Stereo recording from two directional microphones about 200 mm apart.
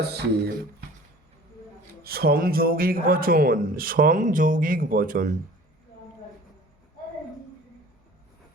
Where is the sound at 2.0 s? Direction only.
50° right (ahead or behind).